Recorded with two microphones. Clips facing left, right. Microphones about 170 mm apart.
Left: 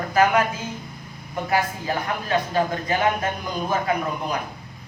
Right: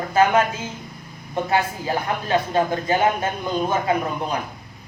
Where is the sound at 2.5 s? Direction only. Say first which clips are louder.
Right 3 dB; 30° right (ahead or behind).